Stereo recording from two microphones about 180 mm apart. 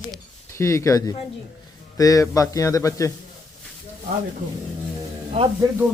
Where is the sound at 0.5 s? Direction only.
15° left (ahead or behind).